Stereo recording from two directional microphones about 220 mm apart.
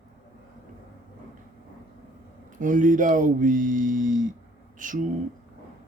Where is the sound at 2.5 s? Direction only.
35° right (ahead or behind).